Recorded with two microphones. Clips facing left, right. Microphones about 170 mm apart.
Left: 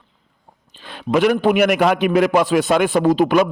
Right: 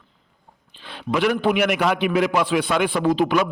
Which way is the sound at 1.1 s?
45° left (ahead or behind).